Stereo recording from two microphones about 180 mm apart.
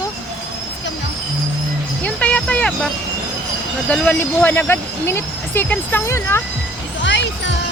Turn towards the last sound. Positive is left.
turn(degrees=85)